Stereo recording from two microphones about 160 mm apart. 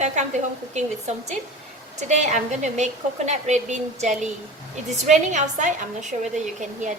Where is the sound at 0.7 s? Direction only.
45° right (ahead or behind).